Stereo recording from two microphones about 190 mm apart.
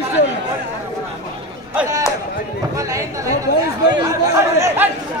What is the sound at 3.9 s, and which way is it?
Speech, 20° right (ahead or behind).